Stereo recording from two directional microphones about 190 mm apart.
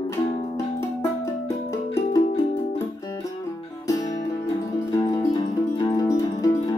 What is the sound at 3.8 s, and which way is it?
Music, 20° left (ahead or behind).